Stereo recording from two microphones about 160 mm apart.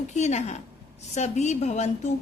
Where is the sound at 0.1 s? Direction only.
45° left (ahead or behind).